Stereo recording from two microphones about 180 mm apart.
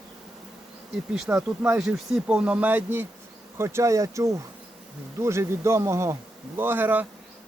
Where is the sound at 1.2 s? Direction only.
5° right (ahead or behind).